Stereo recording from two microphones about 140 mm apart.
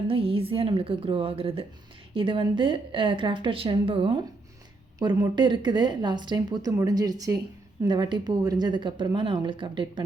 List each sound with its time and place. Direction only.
0.1 s speech: 40° right (ahead or behind)
4.9 s speech: 30° right (ahead or behind)